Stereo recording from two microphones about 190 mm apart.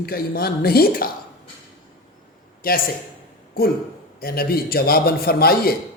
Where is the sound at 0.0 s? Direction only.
55° left (ahead or behind).